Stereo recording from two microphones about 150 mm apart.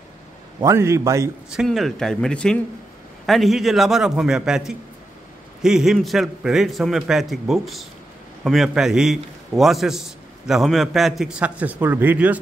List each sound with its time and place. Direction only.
0.6 s a man's voice: 20° right (ahead or behind)
1.5 s a man's voice: centre (ahead or behind)